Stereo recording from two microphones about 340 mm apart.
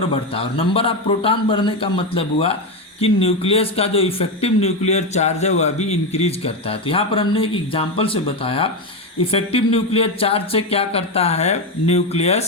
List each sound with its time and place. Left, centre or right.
0.1 s speech: centre